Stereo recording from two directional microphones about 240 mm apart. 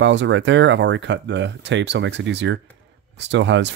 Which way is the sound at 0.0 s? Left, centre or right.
Right.